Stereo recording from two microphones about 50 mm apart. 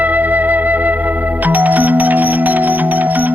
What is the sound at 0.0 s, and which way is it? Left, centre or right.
Music, right.